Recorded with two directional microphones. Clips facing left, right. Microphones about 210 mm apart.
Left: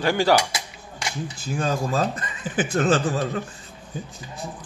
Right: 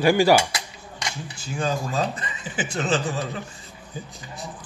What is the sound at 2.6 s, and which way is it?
Speech, 55° left (ahead or behind).